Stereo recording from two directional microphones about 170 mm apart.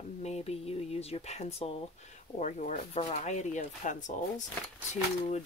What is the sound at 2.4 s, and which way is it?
Speech, 45° left (ahead or behind).